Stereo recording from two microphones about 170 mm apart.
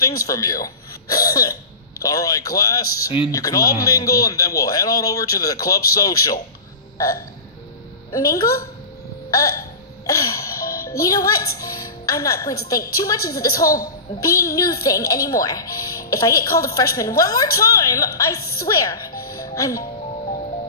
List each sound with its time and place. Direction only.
0.0 s speech: 20° left (ahead or behind)
7.0 s hiccup: 20° left (ahead or behind)
8.1 s speech: 20° left (ahead or behind)
9.3 s hiccup: 20° left (ahead or behind)
10.9 s speech: 20° left (ahead or behind)